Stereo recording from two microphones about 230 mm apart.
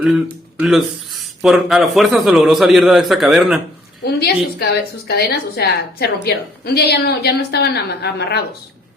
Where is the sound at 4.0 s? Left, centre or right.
Left.